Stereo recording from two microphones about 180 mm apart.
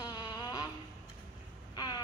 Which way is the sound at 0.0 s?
25° left (ahead or behind).